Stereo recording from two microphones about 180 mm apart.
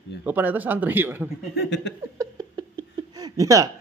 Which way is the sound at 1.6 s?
75° left (ahead or behind).